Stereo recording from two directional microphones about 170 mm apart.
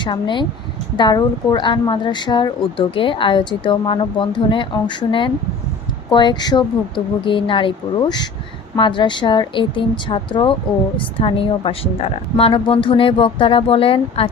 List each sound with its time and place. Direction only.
0.0 s a woman's voice: 30° left (ahead or behind)